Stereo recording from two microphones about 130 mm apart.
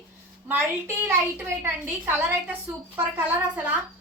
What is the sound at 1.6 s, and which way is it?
A woman's voice, 15° right (ahead or behind).